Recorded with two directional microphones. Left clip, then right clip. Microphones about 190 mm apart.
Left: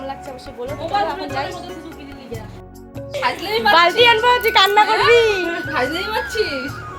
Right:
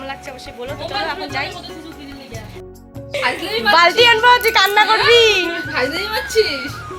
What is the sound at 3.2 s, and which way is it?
Speech, 35° left (ahead or behind).